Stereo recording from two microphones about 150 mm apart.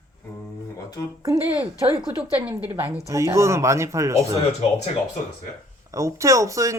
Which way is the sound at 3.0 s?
20° right (ahead or behind).